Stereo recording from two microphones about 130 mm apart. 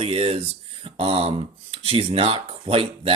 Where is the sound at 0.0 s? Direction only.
45° right (ahead or behind).